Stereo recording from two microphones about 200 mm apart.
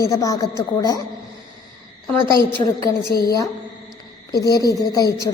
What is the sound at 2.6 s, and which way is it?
Speech, 20° left (ahead or behind).